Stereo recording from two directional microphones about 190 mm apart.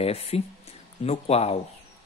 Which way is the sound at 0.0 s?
35° left (ahead or behind).